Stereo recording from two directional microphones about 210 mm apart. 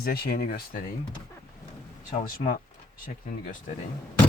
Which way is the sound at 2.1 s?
35° left (ahead or behind).